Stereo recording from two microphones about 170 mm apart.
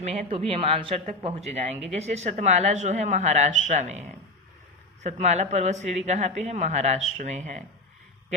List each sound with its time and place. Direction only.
0.0 s speech: 40° right (ahead or behind)